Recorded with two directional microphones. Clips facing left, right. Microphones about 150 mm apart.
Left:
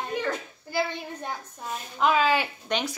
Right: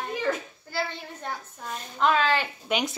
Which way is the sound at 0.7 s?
15° left (ahead or behind).